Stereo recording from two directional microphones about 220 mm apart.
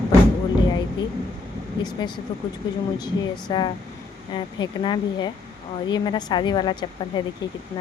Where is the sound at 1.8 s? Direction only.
20° left (ahead or behind).